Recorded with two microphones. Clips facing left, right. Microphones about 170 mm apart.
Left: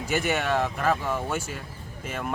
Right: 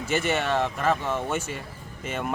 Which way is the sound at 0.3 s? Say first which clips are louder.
Even; 5° left (ahead or behind).